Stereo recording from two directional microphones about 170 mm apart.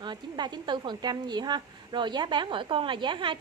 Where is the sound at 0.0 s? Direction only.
25° right (ahead or behind).